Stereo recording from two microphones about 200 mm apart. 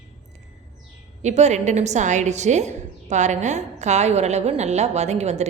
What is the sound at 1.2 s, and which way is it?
A woman's voice, 35° right (ahead or behind).